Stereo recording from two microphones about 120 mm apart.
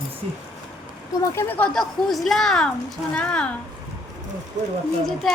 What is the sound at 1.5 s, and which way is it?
Speech, 10° left (ahead or behind).